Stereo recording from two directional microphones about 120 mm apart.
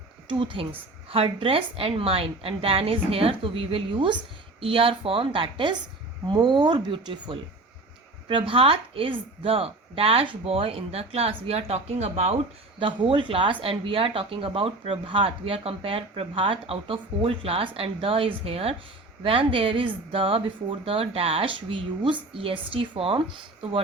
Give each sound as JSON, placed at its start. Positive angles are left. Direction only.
{"t": 0.3, "sound": "speech", "side_deg": -45}
{"t": 12.8, "sound": "speech", "side_deg": -45}